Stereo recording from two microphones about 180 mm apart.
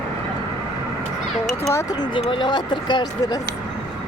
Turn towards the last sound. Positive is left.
turn(degrees=25)  # may be behind; listen again after turning